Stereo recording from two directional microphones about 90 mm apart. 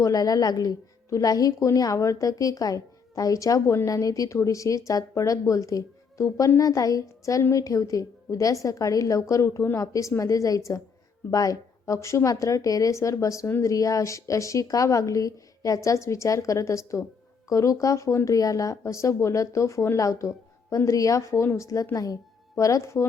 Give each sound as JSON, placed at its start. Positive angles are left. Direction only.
{"t": 0.0, "sound": "a woman's voice", "side_deg": 40}